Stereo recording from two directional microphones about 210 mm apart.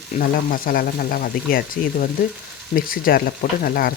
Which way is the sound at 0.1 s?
45° left (ahead or behind).